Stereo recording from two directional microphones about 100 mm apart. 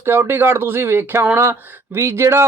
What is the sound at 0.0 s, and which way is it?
Speech, 25° right (ahead or behind).